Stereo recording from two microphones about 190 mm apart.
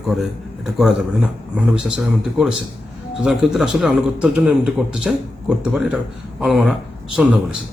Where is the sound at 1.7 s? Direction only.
5° right (ahead or behind).